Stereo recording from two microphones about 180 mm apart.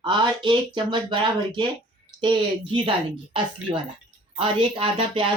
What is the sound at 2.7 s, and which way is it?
Speech, 30° right (ahead or behind).